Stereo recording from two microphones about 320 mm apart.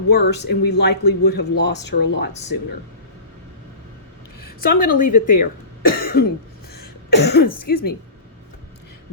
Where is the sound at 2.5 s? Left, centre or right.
Left.